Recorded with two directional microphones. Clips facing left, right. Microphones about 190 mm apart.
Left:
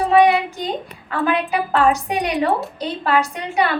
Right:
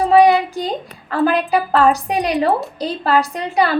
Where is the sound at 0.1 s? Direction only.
35° right (ahead or behind).